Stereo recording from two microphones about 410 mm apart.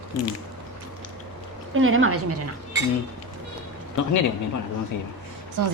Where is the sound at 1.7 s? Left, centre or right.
Right.